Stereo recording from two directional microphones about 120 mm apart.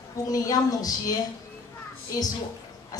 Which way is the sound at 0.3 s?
30° left (ahead or behind).